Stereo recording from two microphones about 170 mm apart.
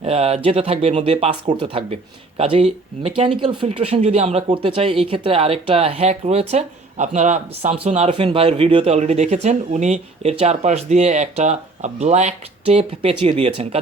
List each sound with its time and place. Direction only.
0.0 s speech: 35° right (ahead or behind)